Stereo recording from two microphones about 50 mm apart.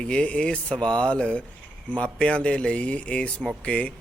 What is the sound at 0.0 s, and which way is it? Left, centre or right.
Speech, left.